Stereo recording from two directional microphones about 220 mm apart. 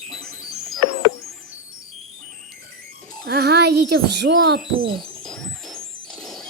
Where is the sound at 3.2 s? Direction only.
45° right (ahead or behind).